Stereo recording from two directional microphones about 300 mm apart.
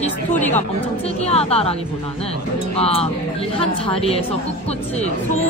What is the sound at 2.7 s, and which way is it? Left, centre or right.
Speech, centre.